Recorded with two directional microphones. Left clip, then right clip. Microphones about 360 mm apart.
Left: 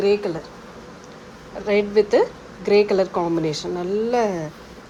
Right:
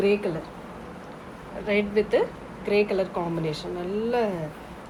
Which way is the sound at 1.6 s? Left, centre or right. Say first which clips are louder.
Left 6 dB; centre.